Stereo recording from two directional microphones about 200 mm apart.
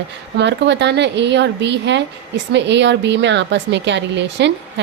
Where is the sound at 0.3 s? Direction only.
60° right (ahead or behind).